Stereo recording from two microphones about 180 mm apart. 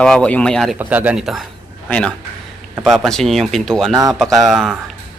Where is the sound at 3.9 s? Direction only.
20° right (ahead or behind).